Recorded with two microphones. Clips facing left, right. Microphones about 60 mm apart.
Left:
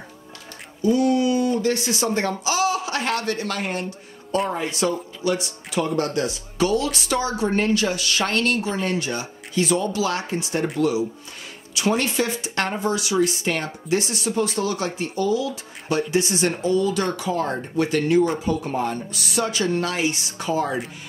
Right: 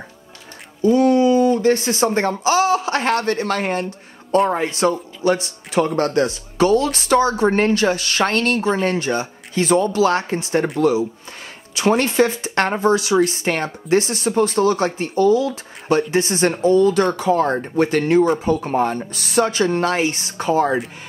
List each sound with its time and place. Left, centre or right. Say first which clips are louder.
0.8 s speech: right 5 dB; right